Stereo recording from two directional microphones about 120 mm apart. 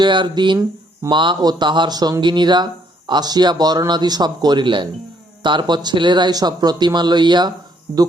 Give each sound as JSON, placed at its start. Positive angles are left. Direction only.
{"t": 0.0, "sound": "speech", "side_deg": -40}